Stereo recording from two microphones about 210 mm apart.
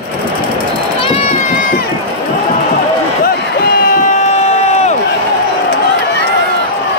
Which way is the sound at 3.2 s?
45° left (ahead or behind).